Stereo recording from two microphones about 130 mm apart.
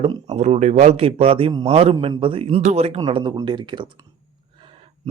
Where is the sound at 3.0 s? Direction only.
35° right (ahead or behind).